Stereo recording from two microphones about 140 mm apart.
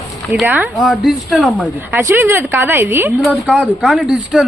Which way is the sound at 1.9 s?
15° right (ahead or behind).